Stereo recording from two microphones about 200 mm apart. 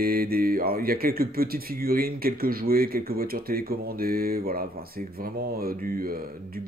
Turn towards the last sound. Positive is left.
turn(degrees=-45)  # may be behind; listen again after turning